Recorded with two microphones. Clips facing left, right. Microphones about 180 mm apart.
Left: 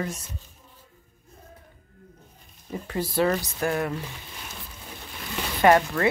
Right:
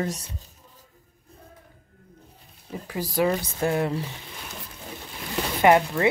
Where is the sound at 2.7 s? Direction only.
10° right (ahead or behind); by 4.1 s 25° right (ahead or behind).